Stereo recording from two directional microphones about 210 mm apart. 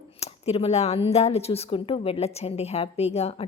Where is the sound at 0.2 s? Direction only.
30° left (ahead or behind).